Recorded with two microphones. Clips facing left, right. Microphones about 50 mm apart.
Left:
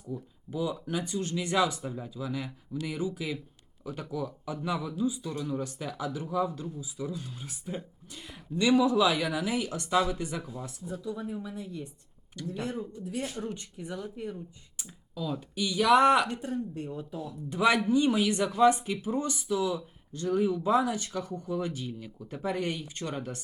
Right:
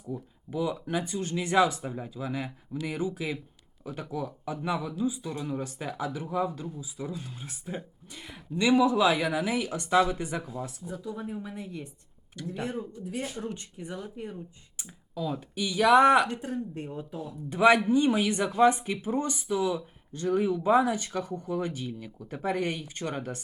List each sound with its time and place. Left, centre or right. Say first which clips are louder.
0.5 s a woman's voice: right 2 dB; right